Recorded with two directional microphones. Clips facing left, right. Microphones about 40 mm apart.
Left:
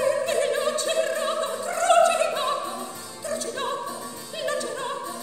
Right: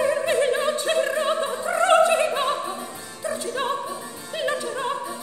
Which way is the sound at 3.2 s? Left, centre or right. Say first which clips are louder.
Right 3 dB; right.